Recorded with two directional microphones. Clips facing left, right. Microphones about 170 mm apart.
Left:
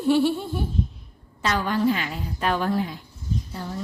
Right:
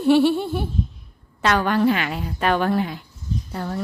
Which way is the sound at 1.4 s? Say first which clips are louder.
Right 4 dB; 65° right (ahead or behind).